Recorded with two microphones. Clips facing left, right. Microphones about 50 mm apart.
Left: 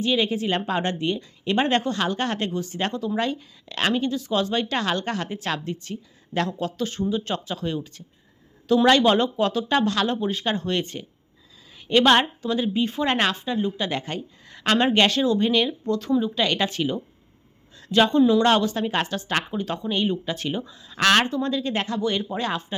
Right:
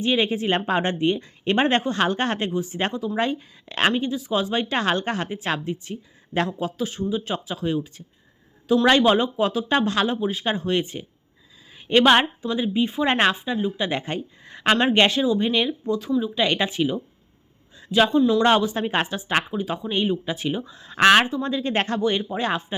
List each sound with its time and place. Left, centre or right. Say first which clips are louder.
0.0 s a woman's voice: right 1 dB; right
2.5 s a woman's voice: right 2 dB; centre
5.3 s a woman's voice: right 2 dB; centre
10.1 s a woman's voice: even; centre
13.1 s a woman's voice: right 4 dB; right
13.4 s a woman's voice: right 1 dB; centre
15.2 s a woman's voice: even; centre
18.4 s a woman's voice: right 1 dB; centre
20.7 s speech: right 6 dB; right
21.1 s a woman's voice: right 1 dB; centre
21.7 s speech: right 3 dB; right
22.0 s a woman's voice: right 2 dB; right